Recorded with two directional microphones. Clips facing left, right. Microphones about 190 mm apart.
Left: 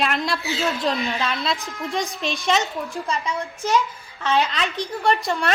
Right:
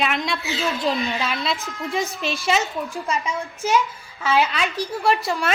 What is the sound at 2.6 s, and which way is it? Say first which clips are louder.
Speech: even; 35° left (ahead or behind).